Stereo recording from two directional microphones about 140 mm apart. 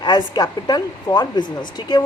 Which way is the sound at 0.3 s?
30° left (ahead or behind).